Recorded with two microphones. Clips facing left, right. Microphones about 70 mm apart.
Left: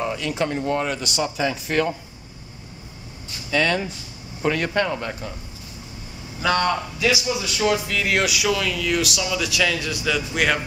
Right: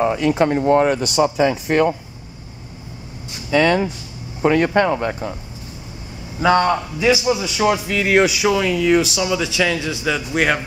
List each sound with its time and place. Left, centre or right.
0.0 s speech: right
1.7 s speech: right
3.3 s speech: right
6.4 s a man's voice: centre
8.3 s a man's voice: right